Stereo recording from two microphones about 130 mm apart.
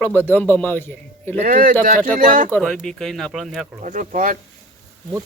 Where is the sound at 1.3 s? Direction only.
90° right.